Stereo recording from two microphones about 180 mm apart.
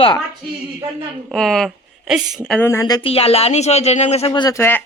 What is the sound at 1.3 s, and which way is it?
A woman's voice, centre (ahead or behind).